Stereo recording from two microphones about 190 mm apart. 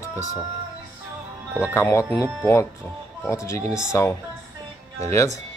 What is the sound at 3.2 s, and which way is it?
Speech, 15° left (ahead or behind).